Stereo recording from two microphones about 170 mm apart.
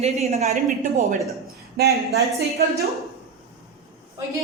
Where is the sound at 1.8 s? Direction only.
70° right (ahead or behind).